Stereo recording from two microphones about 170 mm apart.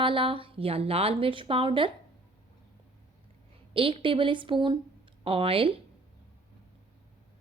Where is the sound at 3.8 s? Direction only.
30° right (ahead or behind).